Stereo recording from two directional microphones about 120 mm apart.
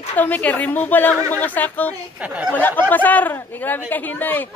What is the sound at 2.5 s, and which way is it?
Speech, 15° left (ahead or behind).